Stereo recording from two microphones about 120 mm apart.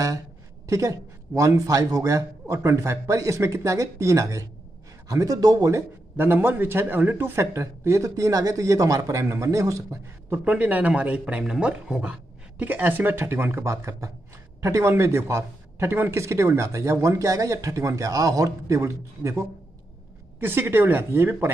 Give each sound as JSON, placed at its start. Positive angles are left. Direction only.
{"t": 0.7, "sound": "a man's voice", "side_deg": -25}
{"t": 10.4, "sound": "a man's voice", "side_deg": -10}